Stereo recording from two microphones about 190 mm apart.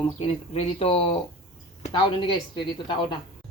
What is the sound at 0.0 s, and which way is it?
Speech, 30° left (ahead or behind).